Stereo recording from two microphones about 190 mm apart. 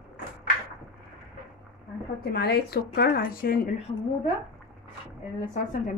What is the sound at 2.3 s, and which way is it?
A woman's voice, 60° left (ahead or behind).